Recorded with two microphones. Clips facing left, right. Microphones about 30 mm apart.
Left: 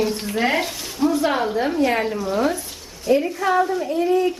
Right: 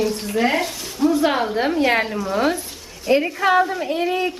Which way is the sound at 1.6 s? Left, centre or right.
Right.